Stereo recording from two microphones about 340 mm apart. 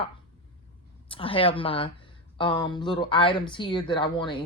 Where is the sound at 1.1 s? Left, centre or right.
Centre.